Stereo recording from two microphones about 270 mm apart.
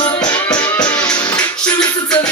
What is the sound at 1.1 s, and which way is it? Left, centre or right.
Music, centre.